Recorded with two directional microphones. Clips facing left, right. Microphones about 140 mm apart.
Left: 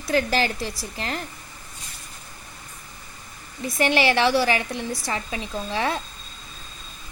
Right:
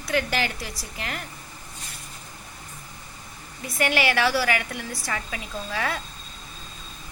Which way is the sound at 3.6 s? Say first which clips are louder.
Left 3 dB; 25° left (ahead or behind).